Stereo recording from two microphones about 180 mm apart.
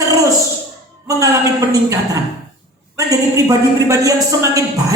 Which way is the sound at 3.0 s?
20° right (ahead or behind).